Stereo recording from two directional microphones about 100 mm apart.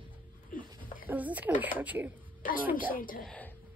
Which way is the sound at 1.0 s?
15° right (ahead or behind).